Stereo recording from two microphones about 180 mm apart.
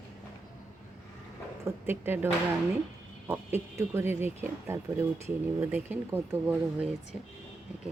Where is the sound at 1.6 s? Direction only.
10° right (ahead or behind).